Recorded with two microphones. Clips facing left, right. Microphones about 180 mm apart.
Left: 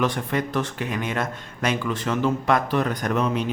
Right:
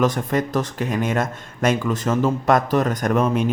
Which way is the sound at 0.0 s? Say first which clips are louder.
Right 4 dB; 40° right (ahead or behind).